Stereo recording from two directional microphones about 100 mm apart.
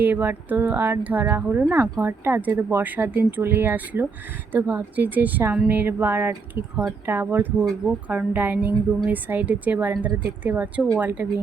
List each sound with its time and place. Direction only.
0.0 s speech: 20° right (ahead or behind)